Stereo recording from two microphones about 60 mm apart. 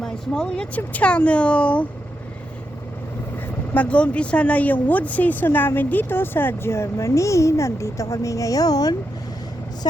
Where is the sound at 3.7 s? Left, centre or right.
Left.